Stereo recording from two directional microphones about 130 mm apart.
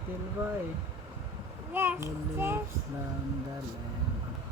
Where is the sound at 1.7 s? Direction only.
15° right (ahead or behind).